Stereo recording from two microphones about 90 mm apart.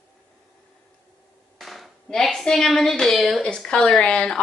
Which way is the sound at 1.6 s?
Centre (ahead or behind).